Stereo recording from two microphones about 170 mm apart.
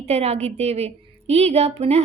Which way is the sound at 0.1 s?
40° right (ahead or behind).